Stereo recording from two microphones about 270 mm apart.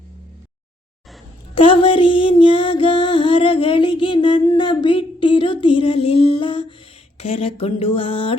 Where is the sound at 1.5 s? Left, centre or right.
Centre.